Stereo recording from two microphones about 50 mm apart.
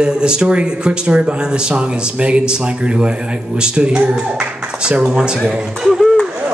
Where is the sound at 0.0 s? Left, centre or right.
Centre.